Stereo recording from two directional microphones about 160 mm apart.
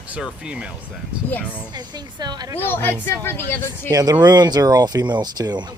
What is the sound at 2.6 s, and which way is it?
Speech, 15° left (ahead or behind).